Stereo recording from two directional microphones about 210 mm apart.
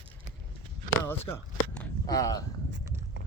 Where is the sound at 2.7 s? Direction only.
60° right (ahead or behind).